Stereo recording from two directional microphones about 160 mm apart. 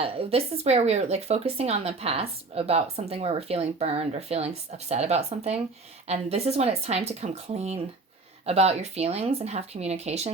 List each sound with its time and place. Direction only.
0.0 s speech: 35° right (ahead or behind)